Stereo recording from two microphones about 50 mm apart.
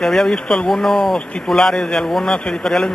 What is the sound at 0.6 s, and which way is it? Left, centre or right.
Speech, centre.